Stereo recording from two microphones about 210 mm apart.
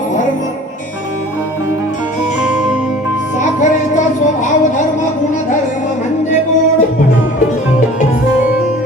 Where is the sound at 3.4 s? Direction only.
35° left (ahead or behind).